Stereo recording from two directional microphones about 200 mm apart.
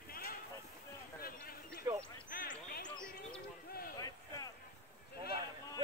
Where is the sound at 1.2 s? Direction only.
50° left (ahead or behind).